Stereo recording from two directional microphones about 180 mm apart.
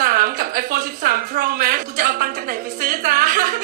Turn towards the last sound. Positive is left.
turn(degrees=-50)  # may be behind; listen again after turning